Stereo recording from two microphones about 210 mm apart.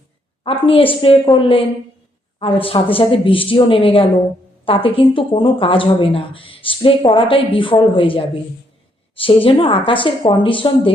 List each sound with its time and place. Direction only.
0.4 s speech: 25° left (ahead or behind)